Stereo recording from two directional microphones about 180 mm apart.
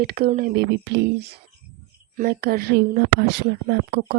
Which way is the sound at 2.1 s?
55° right (ahead or behind).